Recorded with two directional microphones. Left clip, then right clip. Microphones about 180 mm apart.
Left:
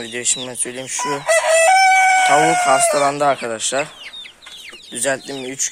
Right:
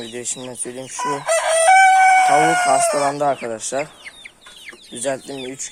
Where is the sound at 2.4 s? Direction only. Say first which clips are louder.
Left 1 dB; 20° left (ahead or behind).